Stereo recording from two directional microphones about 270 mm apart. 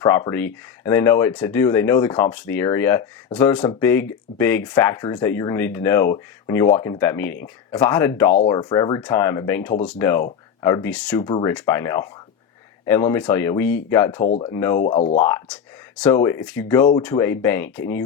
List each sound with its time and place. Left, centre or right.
0.0 s speech: centre
11.2 s speech: centre
14.3 s speech: left
14.5 s speech: centre
14.8 s speech: left
15.2 s speech: centre